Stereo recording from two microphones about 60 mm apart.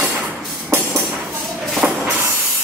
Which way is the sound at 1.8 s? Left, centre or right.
Right.